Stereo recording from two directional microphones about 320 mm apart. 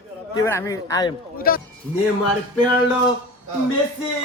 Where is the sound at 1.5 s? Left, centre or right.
Left.